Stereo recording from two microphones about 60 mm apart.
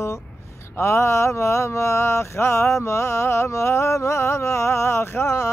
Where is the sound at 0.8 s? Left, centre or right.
Left.